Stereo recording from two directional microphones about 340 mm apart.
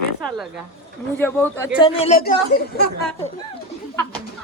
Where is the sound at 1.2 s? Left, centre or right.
Centre.